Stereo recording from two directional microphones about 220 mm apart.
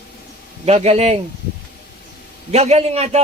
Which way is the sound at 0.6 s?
30° right (ahead or behind).